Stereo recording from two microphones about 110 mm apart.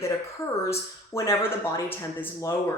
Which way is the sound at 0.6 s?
25° left (ahead or behind).